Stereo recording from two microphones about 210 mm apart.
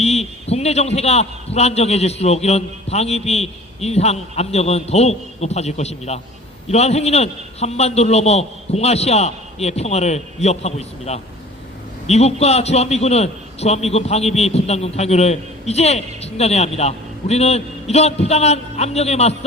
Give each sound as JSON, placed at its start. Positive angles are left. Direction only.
{"t": 0.0, "sound": "a man's voice", "side_deg": 30}